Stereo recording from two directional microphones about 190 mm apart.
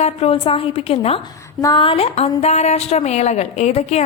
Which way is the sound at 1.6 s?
25° left (ahead or behind).